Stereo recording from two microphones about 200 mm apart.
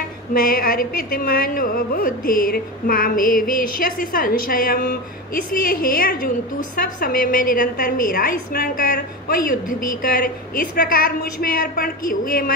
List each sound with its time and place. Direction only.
0.3 s a woman's voice: 45° left (ahead or behind)